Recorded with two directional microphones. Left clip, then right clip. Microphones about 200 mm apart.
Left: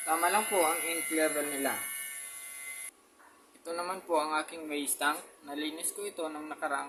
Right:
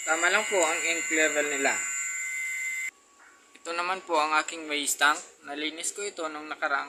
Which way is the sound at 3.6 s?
5° left (ahead or behind).